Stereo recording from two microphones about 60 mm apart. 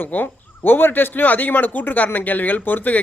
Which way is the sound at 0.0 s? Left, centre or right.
Left.